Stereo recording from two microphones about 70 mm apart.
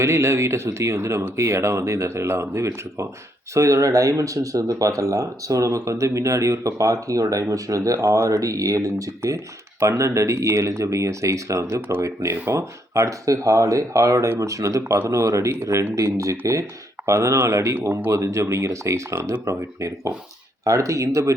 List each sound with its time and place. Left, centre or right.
0.0 s speech: right